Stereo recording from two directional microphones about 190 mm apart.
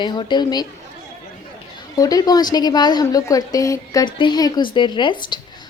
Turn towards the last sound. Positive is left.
turn(degrees=25)  # may be behind; listen again after turning